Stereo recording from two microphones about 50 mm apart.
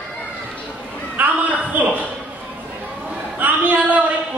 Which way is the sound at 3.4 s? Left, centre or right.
Right.